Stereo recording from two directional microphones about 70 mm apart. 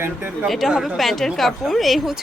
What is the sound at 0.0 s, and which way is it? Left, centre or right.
Speech, right.